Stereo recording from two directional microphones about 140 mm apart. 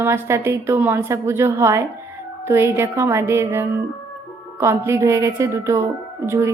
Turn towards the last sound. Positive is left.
turn(degrees=-20)  # may be behind; listen again after turning